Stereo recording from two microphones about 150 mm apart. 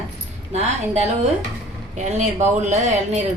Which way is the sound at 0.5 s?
50° right (ahead or behind).